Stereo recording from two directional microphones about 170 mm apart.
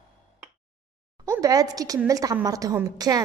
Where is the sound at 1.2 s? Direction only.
20° right (ahead or behind).